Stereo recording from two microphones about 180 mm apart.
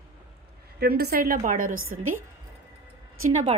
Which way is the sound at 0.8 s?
60° right (ahead or behind).